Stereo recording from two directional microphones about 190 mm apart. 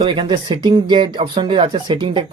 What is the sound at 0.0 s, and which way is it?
Speech, 25° right (ahead or behind).